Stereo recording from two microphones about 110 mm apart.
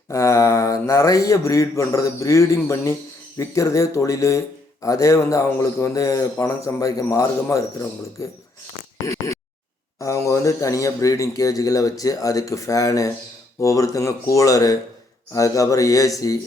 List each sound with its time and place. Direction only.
0.1 s speech: 30° left (ahead or behind)
9.0 s a sound: 30° left (ahead or behind)
10.0 s speech: 30° left (ahead or behind)